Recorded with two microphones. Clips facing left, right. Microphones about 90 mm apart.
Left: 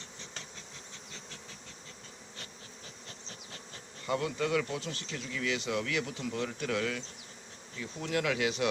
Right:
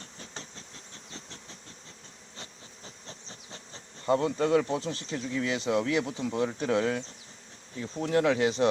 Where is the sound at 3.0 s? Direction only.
25° right (ahead or behind).